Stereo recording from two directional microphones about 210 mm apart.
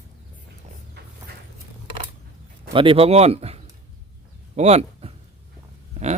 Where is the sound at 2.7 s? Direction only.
25° right (ahead or behind).